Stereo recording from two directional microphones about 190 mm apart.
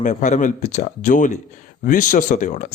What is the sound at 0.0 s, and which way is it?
A woman's voice, 40° left (ahead or behind).